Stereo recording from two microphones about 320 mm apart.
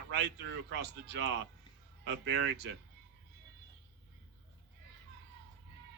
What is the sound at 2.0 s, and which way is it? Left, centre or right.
Speech, right.